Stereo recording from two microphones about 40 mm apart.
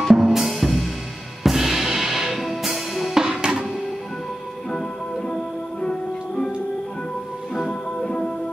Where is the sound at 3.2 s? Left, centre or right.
Centre.